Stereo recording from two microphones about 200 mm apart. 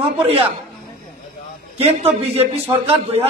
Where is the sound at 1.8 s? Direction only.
30° right (ahead or behind).